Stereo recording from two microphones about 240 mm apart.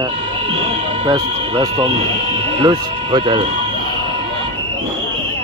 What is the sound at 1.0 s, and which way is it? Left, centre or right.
Speech, centre.